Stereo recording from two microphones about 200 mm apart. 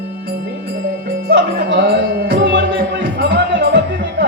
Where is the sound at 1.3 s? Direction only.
55° right (ahead or behind).